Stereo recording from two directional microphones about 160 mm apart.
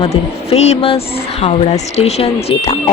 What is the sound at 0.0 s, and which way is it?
A woman's voice, 40° left (ahead or behind).